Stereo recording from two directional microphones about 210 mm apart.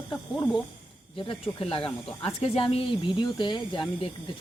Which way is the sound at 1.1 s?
25° left (ahead or behind).